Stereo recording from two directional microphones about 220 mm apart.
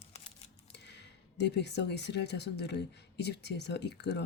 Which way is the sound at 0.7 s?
50° left (ahead or behind).